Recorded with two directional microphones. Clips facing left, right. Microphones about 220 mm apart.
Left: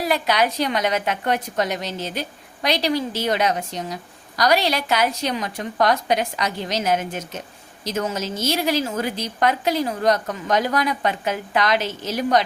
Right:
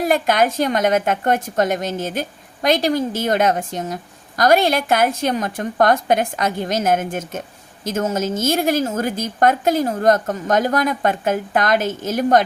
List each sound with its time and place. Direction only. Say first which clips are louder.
0.0 s a woman's voice: right 4 dB; 50° right (ahead or behind)